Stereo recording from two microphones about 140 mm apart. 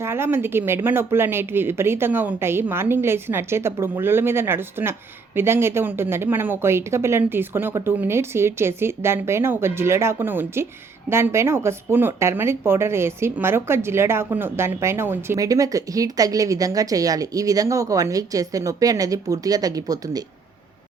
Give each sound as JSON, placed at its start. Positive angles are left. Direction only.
{"t": 0.0, "sound": "speech", "side_deg": -15}